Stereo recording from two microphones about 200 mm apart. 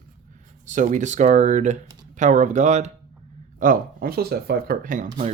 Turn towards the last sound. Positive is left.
turn(degrees=-40)  # may be behind; listen again after turning